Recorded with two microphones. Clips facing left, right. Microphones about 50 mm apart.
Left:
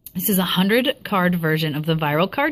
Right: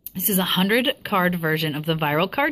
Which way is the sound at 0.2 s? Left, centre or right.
Centre.